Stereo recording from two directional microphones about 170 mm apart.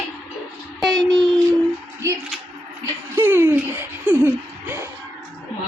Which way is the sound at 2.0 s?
15° right (ahead or behind).